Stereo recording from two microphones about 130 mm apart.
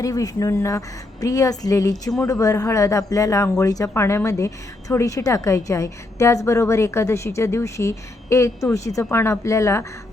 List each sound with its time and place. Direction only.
0.0 s a woman's voice: 25° left (ahead or behind)